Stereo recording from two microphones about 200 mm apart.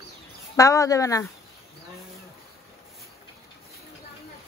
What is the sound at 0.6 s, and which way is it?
Speech, 15° left (ahead or behind).